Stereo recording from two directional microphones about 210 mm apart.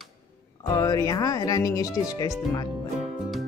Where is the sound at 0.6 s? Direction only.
15° left (ahead or behind).